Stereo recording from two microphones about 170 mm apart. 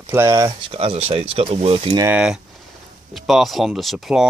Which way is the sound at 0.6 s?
35° right (ahead or behind).